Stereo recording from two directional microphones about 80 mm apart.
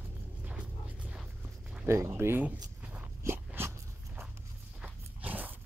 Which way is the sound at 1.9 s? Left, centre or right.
Right.